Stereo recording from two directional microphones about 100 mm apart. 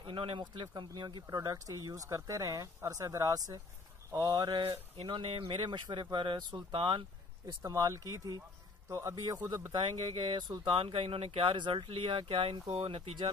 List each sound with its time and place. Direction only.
0.0 s speech: 60° right (ahead or behind)
5.0 s speech: 55° right (ahead or behind)
7.6 s speech: 35° right (ahead or behind)
9.7 s speech: 55° right (ahead or behind)
10.7 s speech: 65° right (ahead or behind)